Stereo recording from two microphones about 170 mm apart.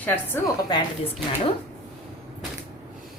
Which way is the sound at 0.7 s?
25° left (ahead or behind).